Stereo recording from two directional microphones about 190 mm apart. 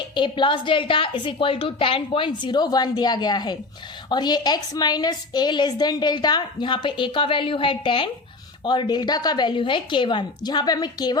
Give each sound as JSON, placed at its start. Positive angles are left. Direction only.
{"t": 0.1, "sound": "a woman's voice", "side_deg": 25}